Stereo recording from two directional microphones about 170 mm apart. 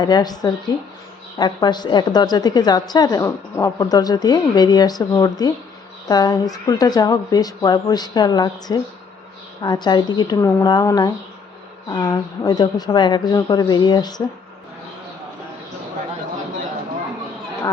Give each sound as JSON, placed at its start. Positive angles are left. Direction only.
{"t": 0.0, "sound": "a woman's voice", "side_deg": 25}